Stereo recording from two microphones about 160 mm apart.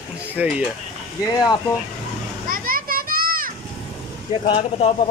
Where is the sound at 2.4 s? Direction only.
60° right (ahead or behind).